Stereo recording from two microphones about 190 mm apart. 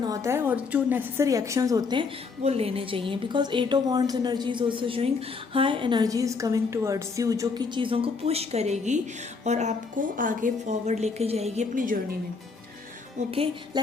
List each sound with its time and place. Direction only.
0.1 s a woman's voice: 15° right (ahead or behind); by 11.9 s 40° right (ahead or behind)
13.1 s speech: 30° right (ahead or behind)